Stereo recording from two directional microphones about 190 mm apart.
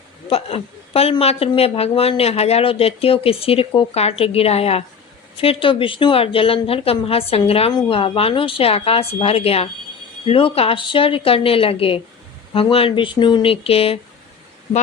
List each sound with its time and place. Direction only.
0.3 s a woman's voice: 30° left (ahead or behind)